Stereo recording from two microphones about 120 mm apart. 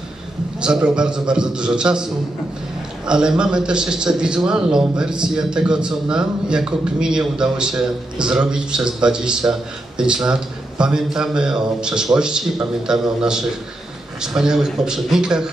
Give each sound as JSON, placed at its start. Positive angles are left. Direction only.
{"t": 0.6, "sound": "a man's voice", "side_deg": -5}
{"t": 3.1, "sound": "a man's voice", "side_deg": -5}